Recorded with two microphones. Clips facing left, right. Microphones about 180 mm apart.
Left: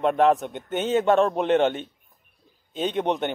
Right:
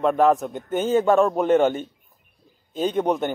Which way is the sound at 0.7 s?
Centre (ahead or behind).